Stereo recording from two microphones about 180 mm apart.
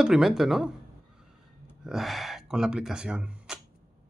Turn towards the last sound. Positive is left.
turn(degrees=-5)  # may be behind; listen again after turning